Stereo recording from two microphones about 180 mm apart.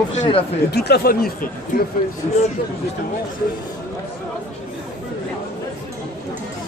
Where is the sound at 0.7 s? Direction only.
65° left (ahead or behind).